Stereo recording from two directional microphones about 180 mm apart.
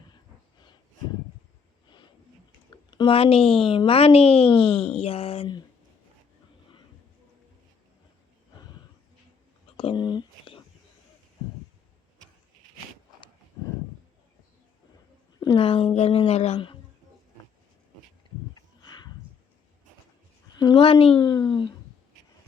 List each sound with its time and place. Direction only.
2.6 s a sound: 25° left (ahead or behind)
3.6 s speech: 30° left (ahead or behind)
9.7 s whispering: 25° left (ahead or behind)
15.4 s speech: 30° left (ahead or behind)
18.5 s a sound: 25° left (ahead or behind)
20.6 s speech: 25° left (ahead or behind)